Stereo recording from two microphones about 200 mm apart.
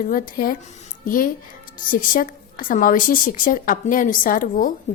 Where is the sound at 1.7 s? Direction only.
45° left (ahead or behind).